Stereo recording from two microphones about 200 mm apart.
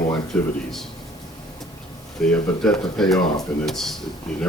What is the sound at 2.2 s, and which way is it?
Speech, 5° left (ahead or behind).